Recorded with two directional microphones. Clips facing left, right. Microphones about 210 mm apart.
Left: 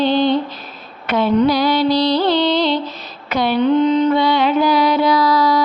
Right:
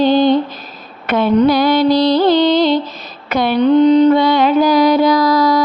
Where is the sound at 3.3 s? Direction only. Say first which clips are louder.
Right 2 dB; 50° right (ahead or behind).